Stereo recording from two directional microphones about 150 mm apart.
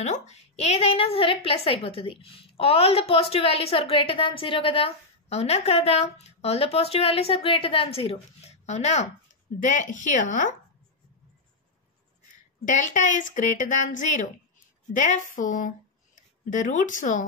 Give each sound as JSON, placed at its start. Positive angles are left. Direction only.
{"t": 0.0, "sound": "a woman's voice", "side_deg": 50}
{"t": 12.6, "sound": "speech", "side_deg": 55}